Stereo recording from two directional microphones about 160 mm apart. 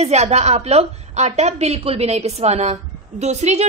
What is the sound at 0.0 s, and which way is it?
A woman's voice, 45° right (ahead or behind).